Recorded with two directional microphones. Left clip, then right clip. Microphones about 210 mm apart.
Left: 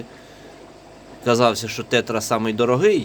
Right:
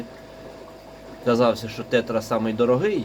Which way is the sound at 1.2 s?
55° left (ahead or behind).